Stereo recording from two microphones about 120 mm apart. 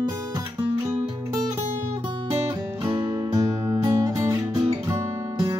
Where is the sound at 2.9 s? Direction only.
25° right (ahead or behind).